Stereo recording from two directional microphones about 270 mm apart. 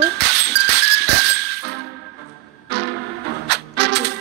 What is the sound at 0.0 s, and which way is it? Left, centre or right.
Music, right.